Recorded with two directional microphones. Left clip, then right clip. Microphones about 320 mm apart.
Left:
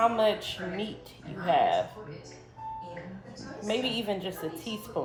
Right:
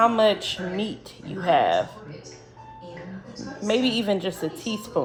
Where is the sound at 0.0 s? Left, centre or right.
Right.